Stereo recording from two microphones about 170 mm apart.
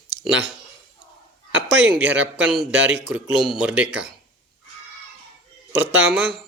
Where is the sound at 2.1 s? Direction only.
5° right (ahead or behind).